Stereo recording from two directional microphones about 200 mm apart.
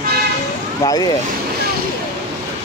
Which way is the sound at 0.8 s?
20° left (ahead or behind).